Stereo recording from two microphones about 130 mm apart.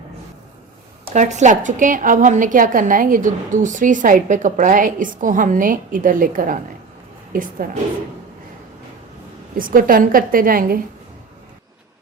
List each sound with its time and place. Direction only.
1.1 s a woman's voice: 65° right (ahead or behind); by 7.5 s 90° right
9.6 s a woman's voice: 90° right